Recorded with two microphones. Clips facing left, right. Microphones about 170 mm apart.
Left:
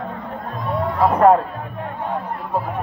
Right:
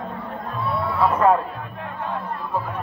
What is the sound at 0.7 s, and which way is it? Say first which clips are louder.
Music: left 4 dB; 45° left (ahead or behind).